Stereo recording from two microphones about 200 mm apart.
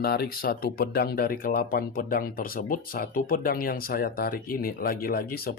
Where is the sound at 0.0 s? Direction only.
50° left (ahead or behind).